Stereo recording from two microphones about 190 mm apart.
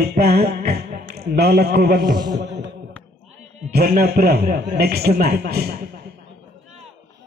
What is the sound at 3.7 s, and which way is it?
A man's voice, 55° right (ahead or behind).